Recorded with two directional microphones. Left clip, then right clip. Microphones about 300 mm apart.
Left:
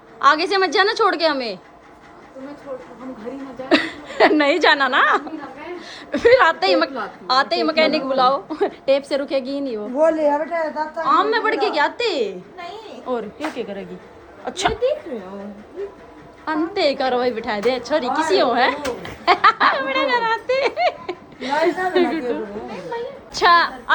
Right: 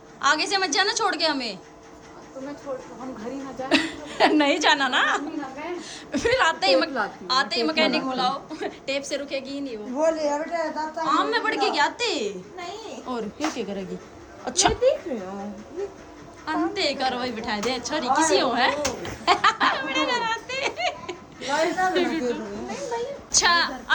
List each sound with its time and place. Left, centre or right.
0.2 s a woman's voice: centre
3.7 s a woman's voice: centre
10.0 s a woman's voice: centre
11.0 s a woman's voice: centre
16.5 s a woman's voice: centre